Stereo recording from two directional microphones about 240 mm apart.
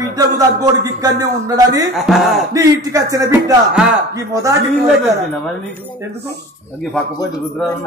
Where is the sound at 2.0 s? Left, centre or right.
Centre.